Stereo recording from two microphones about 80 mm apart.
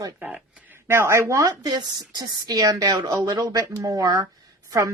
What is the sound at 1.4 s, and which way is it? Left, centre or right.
A woman's voice, right.